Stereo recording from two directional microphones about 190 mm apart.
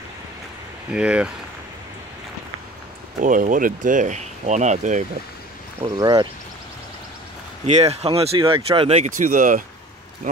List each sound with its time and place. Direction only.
0.9 s speech: 5° right (ahead or behind)
3.2 s speech: 45° right (ahead or behind)
5.9 s speech: 20° right (ahead or behind)
7.6 s speech: 35° right (ahead or behind)